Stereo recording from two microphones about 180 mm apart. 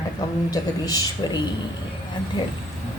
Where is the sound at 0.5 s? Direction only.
20° left (ahead or behind).